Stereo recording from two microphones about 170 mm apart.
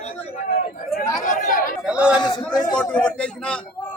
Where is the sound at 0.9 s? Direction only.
50° left (ahead or behind).